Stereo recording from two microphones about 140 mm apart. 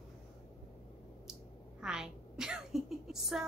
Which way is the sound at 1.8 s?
5° right (ahead or behind).